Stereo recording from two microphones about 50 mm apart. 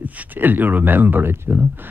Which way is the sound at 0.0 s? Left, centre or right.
Right.